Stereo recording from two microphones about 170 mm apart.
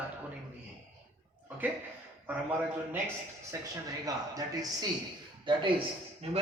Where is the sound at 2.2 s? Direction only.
10° right (ahead or behind).